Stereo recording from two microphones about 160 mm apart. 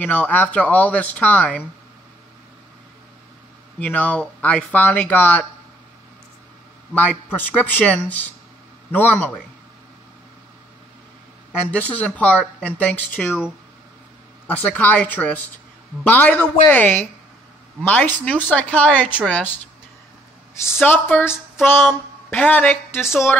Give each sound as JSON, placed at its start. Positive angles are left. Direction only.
{"t": 0.0, "sound": "a woman's voice", "side_deg": 10}
{"t": 3.8, "sound": "a woman's voice", "side_deg": 10}
{"t": 7.3, "sound": "a woman's voice", "side_deg": 10}
{"t": 11.7, "sound": "a woman's voice", "side_deg": 10}
{"t": 14.5, "sound": "a woman's voice", "side_deg": 10}
{"t": 20.5, "sound": "a woman's voice", "side_deg": 15}